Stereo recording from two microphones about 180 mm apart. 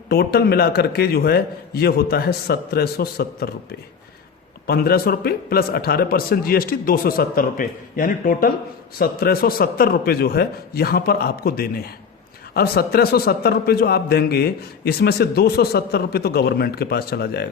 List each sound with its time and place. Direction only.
0.1 s a man's voice: 60° left (ahead or behind)